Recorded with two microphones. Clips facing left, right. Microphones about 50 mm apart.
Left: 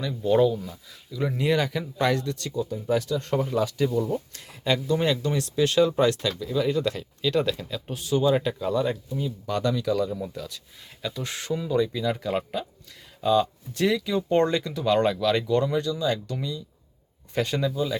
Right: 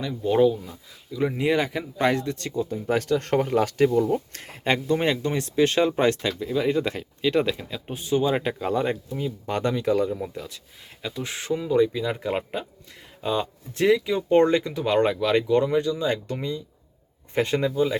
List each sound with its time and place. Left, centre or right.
0.0 s speech: centre; by 10.1 s right
10.1 s speech: right